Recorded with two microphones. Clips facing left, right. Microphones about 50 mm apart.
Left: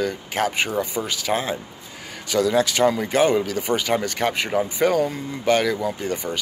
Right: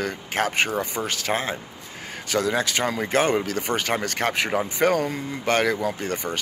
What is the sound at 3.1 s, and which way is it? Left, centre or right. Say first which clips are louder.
Speech: left 3 dB; right.